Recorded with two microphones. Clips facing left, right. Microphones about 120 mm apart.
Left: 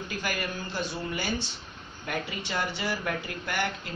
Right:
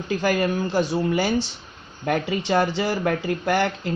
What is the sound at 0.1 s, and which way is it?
Speech, 40° right (ahead or behind).